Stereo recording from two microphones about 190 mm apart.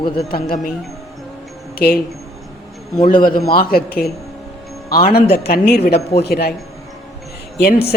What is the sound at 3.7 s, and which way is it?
Speech, 50° left (ahead or behind).